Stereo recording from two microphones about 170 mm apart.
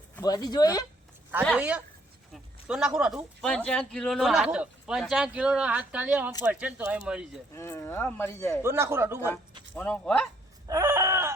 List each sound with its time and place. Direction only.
0.2 s speech: 20° left (ahead or behind)
1.5 s speech: 10° right (ahead or behind)
3.4 s speech: 5° left (ahead or behind)
7.5 s speech: 15° left (ahead or behind)
8.6 s speech: 15° right (ahead or behind)
9.7 s speech: 5° left (ahead or behind)
10.7 s a sound: 15° right (ahead or behind)